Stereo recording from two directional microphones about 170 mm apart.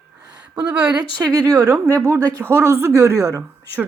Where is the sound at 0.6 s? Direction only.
5° right (ahead or behind).